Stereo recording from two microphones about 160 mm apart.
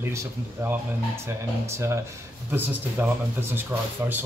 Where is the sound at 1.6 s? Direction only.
15° right (ahead or behind).